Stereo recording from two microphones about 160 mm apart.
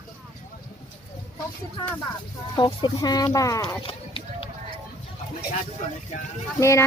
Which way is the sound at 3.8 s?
35° left (ahead or behind).